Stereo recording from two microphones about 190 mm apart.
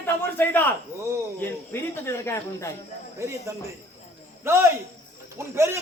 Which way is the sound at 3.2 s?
15° right (ahead or behind).